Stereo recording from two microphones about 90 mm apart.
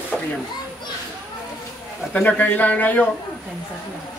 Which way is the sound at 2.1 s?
15° left (ahead or behind).